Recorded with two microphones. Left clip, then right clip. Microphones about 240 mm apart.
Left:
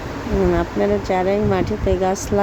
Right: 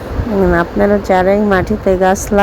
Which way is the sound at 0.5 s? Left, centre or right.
Centre.